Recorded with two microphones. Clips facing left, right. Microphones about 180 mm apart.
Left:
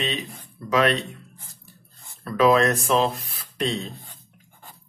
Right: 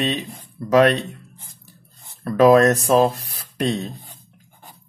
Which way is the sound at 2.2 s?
40° right (ahead or behind).